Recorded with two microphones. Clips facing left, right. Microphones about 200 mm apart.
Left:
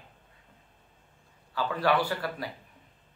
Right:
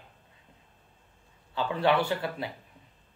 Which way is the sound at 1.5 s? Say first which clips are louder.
Right 2 dB; 25° right (ahead or behind).